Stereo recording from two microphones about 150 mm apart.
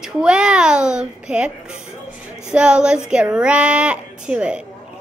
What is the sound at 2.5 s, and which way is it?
Speech, 5° right (ahead or behind).